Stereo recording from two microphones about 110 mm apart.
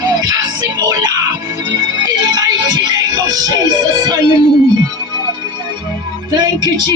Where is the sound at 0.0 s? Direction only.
35° right (ahead or behind).